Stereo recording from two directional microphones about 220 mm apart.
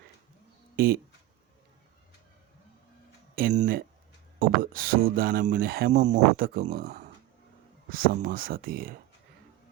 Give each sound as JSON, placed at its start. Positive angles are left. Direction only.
{"t": 0.8, "sound": "speech", "side_deg": -40}
{"t": 3.3, "sound": "a sound", "side_deg": -40}
{"t": 4.4, "sound": "speech", "side_deg": -40}